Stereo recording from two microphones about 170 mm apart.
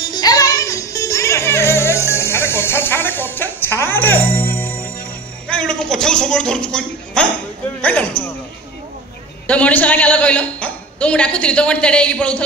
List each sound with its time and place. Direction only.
0.0 s music: 25° left (ahead or behind)
5.5 s a woman's voice: 5° left (ahead or behind)
9.5 s a woman's voice: 10° left (ahead or behind)